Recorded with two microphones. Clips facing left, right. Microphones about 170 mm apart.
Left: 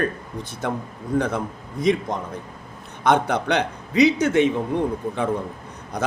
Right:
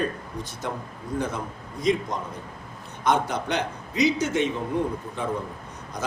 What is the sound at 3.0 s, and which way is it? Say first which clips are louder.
A man's voice: left 4 dB; 65° left (ahead or behind).